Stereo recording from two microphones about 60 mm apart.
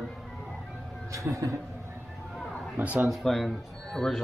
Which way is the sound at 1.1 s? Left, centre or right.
Right.